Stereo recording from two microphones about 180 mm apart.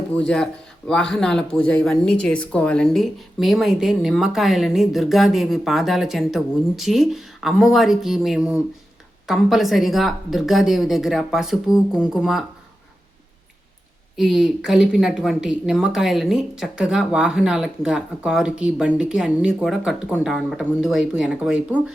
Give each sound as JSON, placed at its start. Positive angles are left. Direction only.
{"t": 0.2, "sound": "speech", "side_deg": 5}
{"t": 14.2, "sound": "speech", "side_deg": 0}